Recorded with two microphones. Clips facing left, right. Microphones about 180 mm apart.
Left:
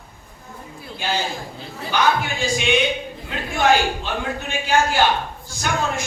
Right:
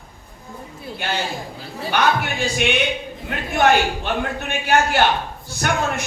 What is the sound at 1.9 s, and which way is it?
A man's voice, 60° right (ahead or behind).